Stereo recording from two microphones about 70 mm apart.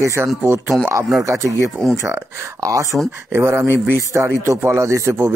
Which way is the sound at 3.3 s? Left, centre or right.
Right.